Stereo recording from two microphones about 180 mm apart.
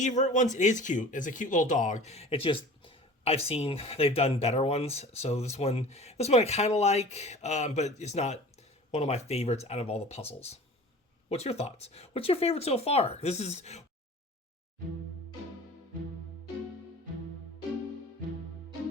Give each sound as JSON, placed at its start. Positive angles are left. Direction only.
{"t": 0.0, "sound": "speech", "side_deg": 45}